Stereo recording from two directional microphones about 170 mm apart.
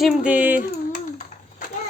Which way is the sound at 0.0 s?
5° right (ahead or behind).